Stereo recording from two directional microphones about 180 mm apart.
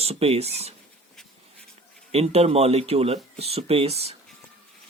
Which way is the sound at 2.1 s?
35° right (ahead or behind).